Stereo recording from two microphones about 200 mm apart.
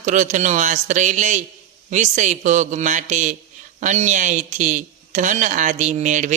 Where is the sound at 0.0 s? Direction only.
40° right (ahead or behind).